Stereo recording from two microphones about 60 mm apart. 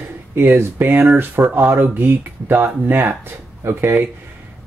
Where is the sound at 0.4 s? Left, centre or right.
Right.